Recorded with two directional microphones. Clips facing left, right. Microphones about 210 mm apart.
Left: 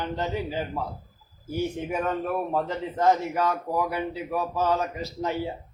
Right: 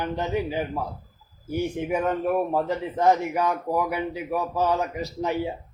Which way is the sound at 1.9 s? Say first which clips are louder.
Right 3 dB; 15° right (ahead or behind).